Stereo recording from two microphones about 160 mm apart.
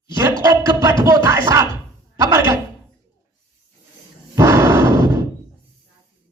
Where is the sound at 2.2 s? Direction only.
20° right (ahead or behind).